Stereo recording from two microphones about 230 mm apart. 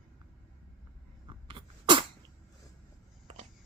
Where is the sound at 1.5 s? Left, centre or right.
Right.